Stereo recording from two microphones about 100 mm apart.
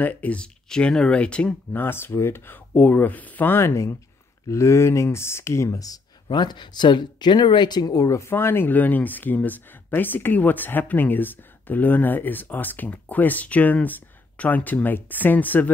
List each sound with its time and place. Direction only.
0.0 s speech: 15° left (ahead or behind); by 5.9 s 35° left (ahead or behind)
6.2 s speech: 50° left (ahead or behind); by 15.7 s 15° left (ahead or behind)